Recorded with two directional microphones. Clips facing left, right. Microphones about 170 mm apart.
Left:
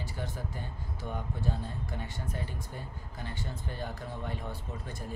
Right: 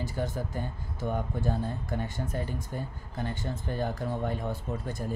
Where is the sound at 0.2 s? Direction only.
45° right (ahead or behind).